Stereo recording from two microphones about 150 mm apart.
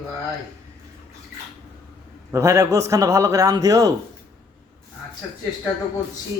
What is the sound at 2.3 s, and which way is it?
A man's voice, 20° right (ahead or behind).